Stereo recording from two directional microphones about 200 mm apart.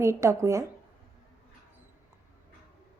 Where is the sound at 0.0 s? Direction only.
15° right (ahead or behind).